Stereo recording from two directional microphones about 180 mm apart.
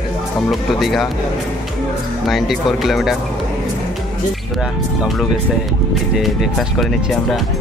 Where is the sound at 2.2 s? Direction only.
Centre (ahead or behind).